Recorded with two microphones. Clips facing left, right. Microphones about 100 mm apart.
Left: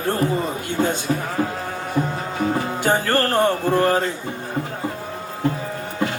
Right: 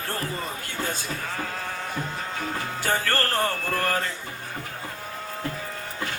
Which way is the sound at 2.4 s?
25° left (ahead or behind).